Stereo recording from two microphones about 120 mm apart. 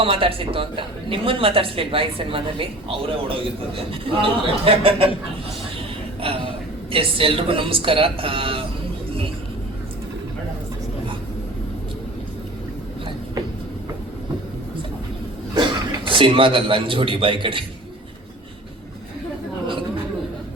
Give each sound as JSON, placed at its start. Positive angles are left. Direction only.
{"t": 0.0, "sound": "a woman's voice", "side_deg": -50}
{"t": 6.2, "sound": "a woman's voice", "side_deg": -50}
{"t": 16.0, "sound": "a woman's voice", "side_deg": -45}